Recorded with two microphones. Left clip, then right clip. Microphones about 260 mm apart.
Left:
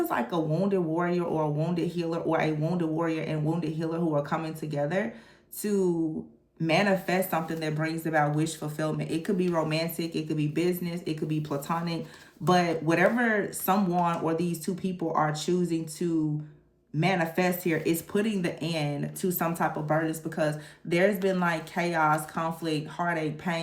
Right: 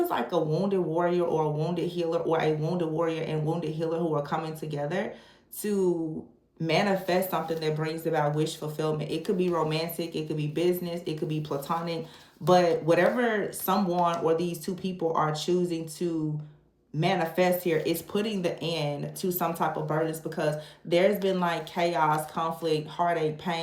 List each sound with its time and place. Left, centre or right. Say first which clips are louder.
0.1 s speech: right 1 dB; left
17.0 s speech: right 1 dB; left